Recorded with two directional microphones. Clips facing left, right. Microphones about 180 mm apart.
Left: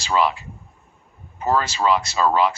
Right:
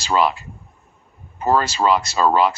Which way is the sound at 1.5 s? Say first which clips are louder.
Right 2 dB; 40° right (ahead or behind).